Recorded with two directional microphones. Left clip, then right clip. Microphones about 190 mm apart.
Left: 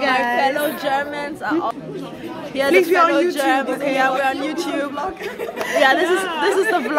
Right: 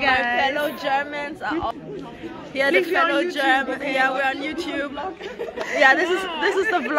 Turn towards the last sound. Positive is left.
turn(degrees=0)  # may be behind; listen again after turning